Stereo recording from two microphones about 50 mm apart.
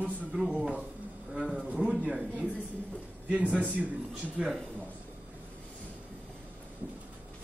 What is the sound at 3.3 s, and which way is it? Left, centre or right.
Speech, right.